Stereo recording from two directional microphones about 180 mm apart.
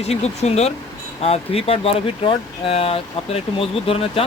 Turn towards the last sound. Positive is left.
turn(degrees=30)  # may be behind; listen again after turning